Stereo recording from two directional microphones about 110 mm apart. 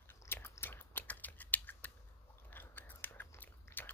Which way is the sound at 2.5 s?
20° left (ahead or behind).